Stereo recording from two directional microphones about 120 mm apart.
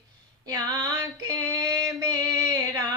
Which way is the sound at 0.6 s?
30° right (ahead or behind).